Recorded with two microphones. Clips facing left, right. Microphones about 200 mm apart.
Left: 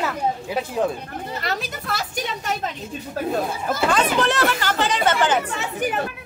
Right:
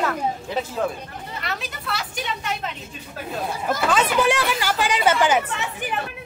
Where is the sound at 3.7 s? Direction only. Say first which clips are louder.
Even; 5° right (ahead or behind).